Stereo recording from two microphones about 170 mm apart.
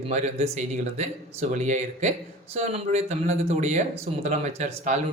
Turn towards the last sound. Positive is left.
turn(degrees=-40)  # may be behind; listen again after turning